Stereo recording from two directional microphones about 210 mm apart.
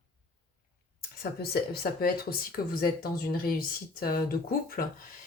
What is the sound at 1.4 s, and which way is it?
Speech, 50° left (ahead or behind).